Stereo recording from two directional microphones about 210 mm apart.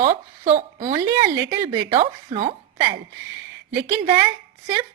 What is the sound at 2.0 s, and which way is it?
Speech, 25° right (ahead or behind).